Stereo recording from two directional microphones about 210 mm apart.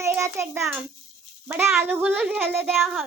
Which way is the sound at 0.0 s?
10° right (ahead or behind).